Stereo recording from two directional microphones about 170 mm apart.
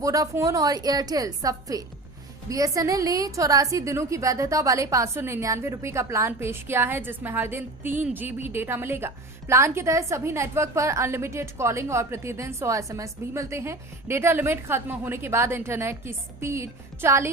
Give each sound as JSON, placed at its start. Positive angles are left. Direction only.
{"t": 0.0, "sound": "a woman's voice", "side_deg": -20}